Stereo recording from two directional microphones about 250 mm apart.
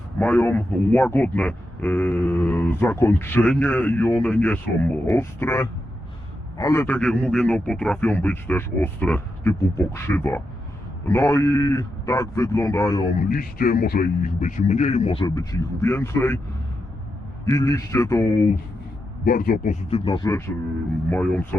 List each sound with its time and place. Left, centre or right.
0.2 s a man's voice: centre
13.2 s speech: left; by 16.4 s centre
17.4 s a man's voice: centre
19.2 s speech: left
20.1 s a man's voice: centre
21.1 s speech: centre